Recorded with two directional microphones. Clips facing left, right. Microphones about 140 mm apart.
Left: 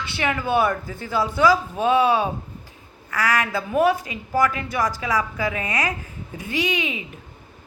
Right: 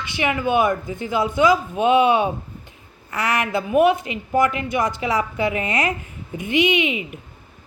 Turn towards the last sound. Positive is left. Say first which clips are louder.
# right 5 dB
turn(degrees=-20)  # may be behind; listen again after turning